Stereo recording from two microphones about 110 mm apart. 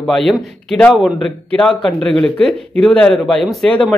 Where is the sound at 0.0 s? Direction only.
5° left (ahead or behind).